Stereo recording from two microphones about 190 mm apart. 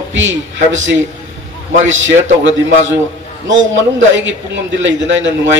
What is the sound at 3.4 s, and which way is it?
A man's voice, 75° right (ahead or behind).